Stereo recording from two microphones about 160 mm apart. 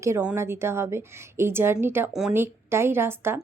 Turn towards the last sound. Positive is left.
turn(degrees=-15)  # may be behind; listen again after turning